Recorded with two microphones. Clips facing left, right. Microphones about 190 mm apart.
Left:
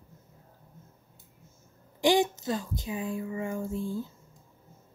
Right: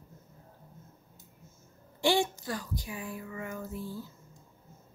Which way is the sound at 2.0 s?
15° left (ahead or behind).